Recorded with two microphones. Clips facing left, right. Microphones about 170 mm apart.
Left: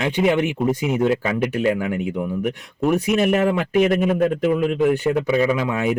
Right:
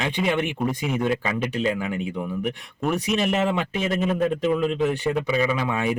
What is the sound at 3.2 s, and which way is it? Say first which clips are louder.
Speech: left 4 dB; 60° left (ahead or behind).